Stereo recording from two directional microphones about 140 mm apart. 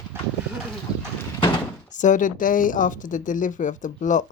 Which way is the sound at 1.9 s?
65° left (ahead or behind).